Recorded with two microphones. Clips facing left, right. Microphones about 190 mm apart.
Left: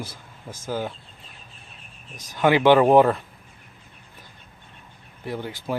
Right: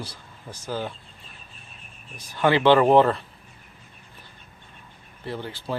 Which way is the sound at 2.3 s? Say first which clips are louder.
Left 1 dB; 15° left (ahead or behind).